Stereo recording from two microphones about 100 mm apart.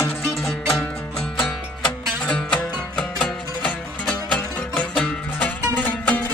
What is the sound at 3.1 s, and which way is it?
Music, centre (ahead or behind).